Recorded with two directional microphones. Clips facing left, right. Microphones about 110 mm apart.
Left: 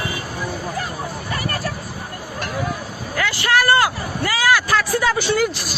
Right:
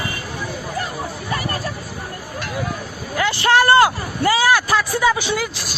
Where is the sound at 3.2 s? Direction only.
25° right (ahead or behind).